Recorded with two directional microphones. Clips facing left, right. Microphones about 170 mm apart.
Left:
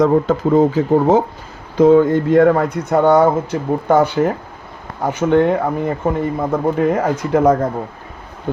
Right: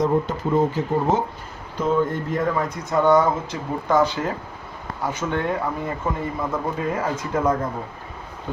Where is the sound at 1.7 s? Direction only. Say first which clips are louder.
Left 11 dB; 90° left; by 5.6 s 60° left (ahead or behind).